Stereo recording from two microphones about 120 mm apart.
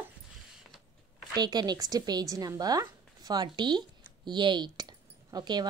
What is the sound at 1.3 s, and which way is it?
A woman's voice, 35° right (ahead or behind).